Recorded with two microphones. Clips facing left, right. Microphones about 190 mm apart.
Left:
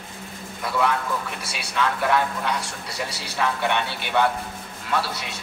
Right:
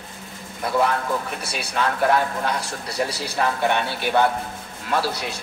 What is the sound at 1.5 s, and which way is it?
Speech, 40° right (ahead or behind).